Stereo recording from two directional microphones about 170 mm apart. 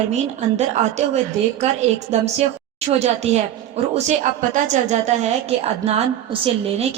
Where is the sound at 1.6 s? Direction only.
40° right (ahead or behind).